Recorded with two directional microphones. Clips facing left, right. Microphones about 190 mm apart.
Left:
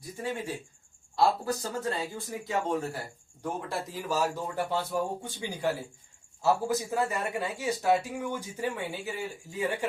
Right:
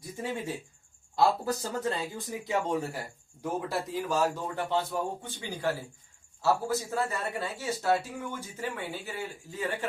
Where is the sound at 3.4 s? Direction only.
Centre (ahead or behind).